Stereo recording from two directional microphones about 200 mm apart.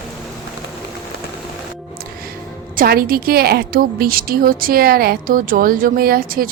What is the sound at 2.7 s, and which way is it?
A woman's voice, 45° right (ahead or behind).